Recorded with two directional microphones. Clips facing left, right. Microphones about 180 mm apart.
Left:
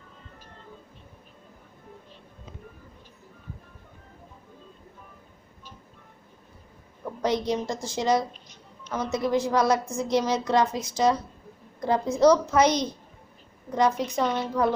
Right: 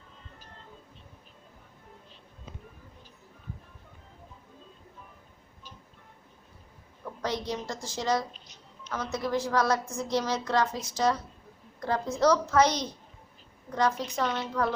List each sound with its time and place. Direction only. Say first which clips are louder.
7.0 s a woman's voice: left 6 dB; 20° left (ahead or behind)